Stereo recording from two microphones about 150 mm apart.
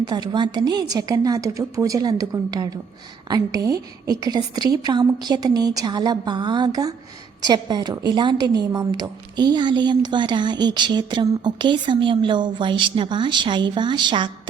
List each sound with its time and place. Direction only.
0.0 s a woman's voice: 30° right (ahead or behind)